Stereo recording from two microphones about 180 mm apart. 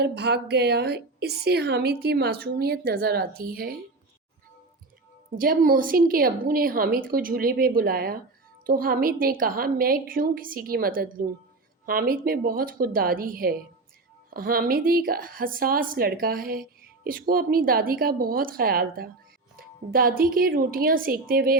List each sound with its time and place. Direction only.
0.0 s a woman's voice: 65° right (ahead or behind)
5.4 s a woman's voice: 50° right (ahead or behind)